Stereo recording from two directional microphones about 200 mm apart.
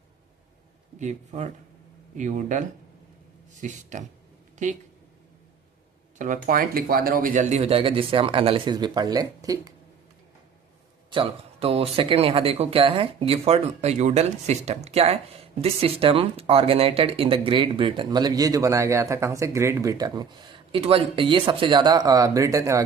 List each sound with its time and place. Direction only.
0.9 s speech: 35° right (ahead or behind)
6.1 s speech: 40° right (ahead or behind); by 9.7 s 20° right (ahead or behind)
11.1 s speech: 25° right (ahead or behind)